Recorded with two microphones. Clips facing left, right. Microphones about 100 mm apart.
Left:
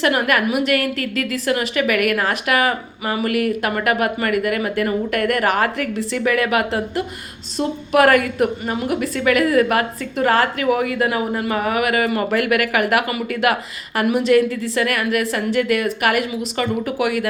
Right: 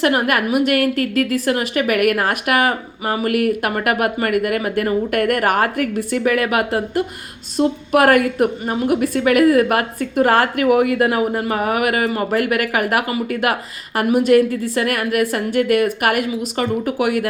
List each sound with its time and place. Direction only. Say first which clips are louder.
0.0 s a woman's voice: right 1 dB; 45° right (ahead or behind)